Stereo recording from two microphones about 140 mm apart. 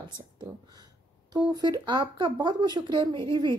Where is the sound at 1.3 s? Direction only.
30° right (ahead or behind).